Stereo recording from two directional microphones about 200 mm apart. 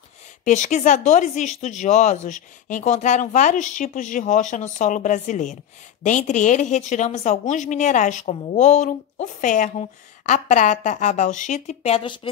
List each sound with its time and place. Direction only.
0.5 s speech: 35° left (ahead or behind)